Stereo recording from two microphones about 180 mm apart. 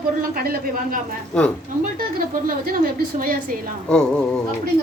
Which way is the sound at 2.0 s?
55° right (ahead or behind).